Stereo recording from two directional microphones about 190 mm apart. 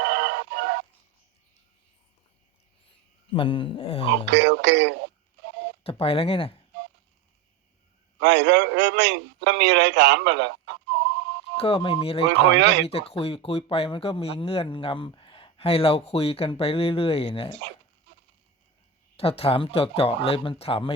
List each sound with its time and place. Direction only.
0.0 s synthetic singing: 65° right (ahead or behind)
3.3 s speech: 25° left (ahead or behind)
4.3 s speech: 65° right (ahead or behind)
5.8 s speech: 30° left (ahead or behind)
8.2 s a man's voice: 65° right (ahead or behind)
11.5 s speech: 30° left (ahead or behind)
12.3 s speech: 65° right (ahead or behind)
12.8 s speech: 30° left (ahead or behind)
19.1 s speech: 30° left (ahead or behind)